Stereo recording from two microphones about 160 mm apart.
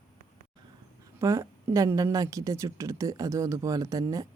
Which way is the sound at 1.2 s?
15° right (ahead or behind).